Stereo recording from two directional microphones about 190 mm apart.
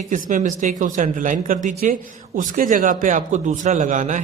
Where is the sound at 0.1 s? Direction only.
40° right (ahead or behind).